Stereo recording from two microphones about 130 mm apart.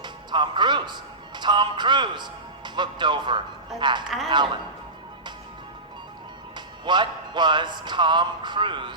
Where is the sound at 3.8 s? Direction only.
35° right (ahead or behind).